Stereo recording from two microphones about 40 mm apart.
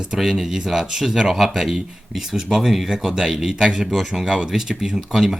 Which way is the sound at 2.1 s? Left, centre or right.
Centre.